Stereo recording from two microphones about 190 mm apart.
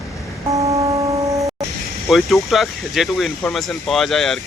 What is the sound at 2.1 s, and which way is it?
Speech, centre (ahead or behind).